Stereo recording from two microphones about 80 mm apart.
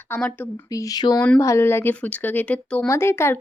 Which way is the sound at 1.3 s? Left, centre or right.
Left.